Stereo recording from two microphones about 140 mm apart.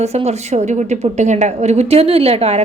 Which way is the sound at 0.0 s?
50° right (ahead or behind).